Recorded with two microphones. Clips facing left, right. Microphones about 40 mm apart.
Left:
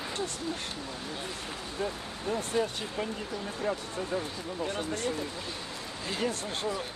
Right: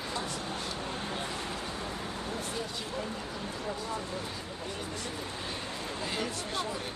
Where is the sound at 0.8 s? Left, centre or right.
Right.